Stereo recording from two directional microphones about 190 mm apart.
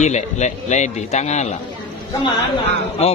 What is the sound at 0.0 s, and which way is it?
A man's voice, 35° left (ahead or behind).